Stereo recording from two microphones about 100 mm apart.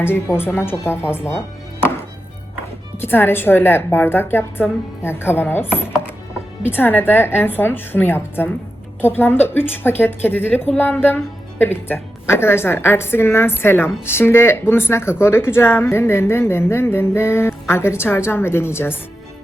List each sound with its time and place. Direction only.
0.0 s a woman's voice: 25° left (ahead or behind)
3.0 s a woman's voice: 20° left (ahead or behind)
6.7 s a woman's voice: 20° left (ahead or behind)